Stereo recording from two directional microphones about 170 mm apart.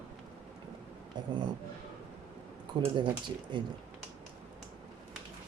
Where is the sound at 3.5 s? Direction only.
25° right (ahead or behind).